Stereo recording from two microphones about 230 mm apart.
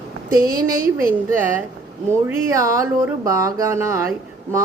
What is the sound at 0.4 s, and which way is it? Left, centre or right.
Speech, right.